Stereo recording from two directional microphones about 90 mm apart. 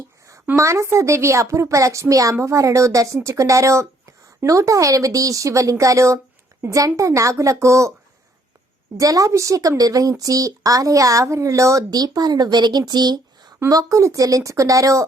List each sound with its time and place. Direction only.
0.5 s speech: 35° right (ahead or behind)
9.0 s speech: 40° right (ahead or behind)
13.7 s speech: 40° right (ahead or behind)